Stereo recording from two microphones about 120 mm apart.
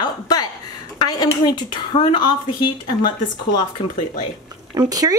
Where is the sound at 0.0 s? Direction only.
35° left (ahead or behind).